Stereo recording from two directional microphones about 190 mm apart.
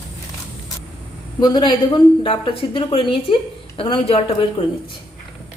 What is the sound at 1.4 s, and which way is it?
Speech, 25° left (ahead or behind).